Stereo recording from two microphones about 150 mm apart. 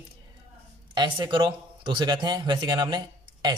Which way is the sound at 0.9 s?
30° right (ahead or behind).